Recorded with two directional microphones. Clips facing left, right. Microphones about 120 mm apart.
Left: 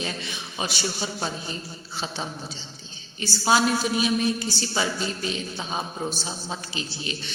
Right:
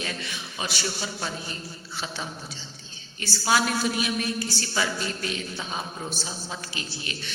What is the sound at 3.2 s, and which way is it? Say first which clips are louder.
A woman's voice: left 3 dB; 25° left (ahead or behind).